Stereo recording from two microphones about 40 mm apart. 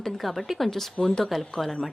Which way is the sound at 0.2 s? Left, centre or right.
Centre.